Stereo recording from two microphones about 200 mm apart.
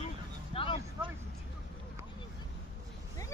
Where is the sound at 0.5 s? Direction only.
30° left (ahead or behind).